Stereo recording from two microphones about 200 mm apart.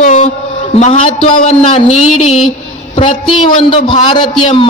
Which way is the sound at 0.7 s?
35° left (ahead or behind).